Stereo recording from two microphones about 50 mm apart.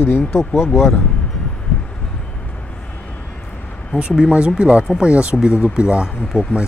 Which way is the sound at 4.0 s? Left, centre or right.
Centre.